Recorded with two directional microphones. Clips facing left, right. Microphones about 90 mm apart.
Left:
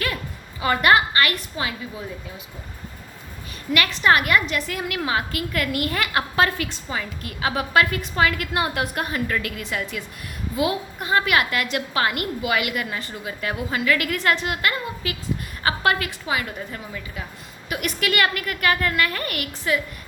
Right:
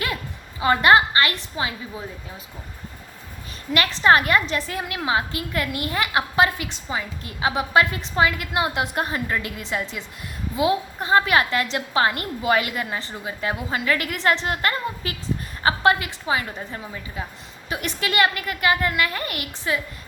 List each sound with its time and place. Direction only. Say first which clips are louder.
0.6 s a woman's voice: right 2 dB; 25° right (ahead or behind)
3.7 s a woman's voice: right 2 dB; 30° right (ahead or behind)
14.4 s a woman's voice: right 1 dB; 35° right (ahead or behind)
15.6 s a woman's voice: right 2 dB; 25° right (ahead or behind)